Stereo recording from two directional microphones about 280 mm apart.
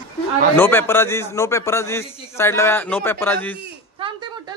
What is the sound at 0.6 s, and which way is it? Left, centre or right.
A man's voice, centre.